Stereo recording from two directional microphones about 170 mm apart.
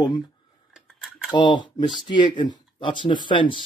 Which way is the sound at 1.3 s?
25° left (ahead or behind).